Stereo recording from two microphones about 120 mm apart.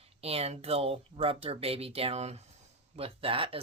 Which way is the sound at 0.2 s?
55° right (ahead or behind).